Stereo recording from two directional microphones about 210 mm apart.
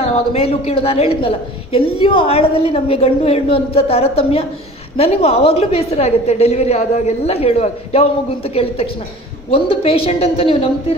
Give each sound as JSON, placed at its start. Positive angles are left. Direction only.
{"t": 0.0, "sound": "a woman's voice", "side_deg": 30}
{"t": 9.5, "sound": "a woman's voice", "side_deg": 25}